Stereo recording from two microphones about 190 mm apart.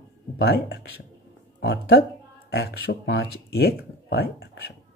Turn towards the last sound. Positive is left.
turn(degrees=55)  # may be behind; listen again after turning